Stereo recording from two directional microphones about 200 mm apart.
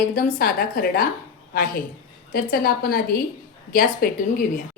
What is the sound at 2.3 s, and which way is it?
A woman's voice, 50° left (ahead or behind).